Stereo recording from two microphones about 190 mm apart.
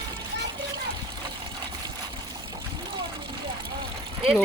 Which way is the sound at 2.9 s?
25° right (ahead or behind).